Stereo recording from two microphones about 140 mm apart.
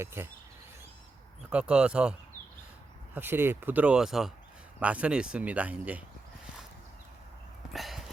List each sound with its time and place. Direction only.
0.0 s speech: 15° right (ahead or behind)
1.5 s speech: 5° right (ahead or behind)
3.2 s speech: 15° right (ahead or behind)
7.7 s a sound: centre (ahead or behind)